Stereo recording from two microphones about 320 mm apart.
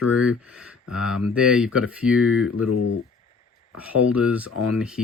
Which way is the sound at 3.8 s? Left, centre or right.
Centre.